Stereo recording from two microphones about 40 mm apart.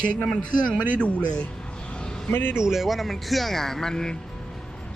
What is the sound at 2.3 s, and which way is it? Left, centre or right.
Speech, left.